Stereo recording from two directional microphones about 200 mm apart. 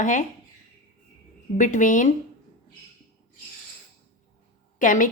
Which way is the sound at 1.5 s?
40° left (ahead or behind).